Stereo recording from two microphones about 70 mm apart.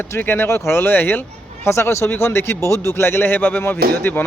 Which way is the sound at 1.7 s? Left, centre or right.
Left.